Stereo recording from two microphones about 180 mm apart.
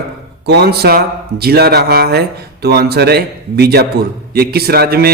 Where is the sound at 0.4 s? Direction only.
65° right (ahead or behind).